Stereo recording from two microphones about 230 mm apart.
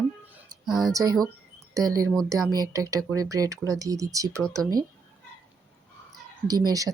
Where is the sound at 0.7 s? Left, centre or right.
Centre.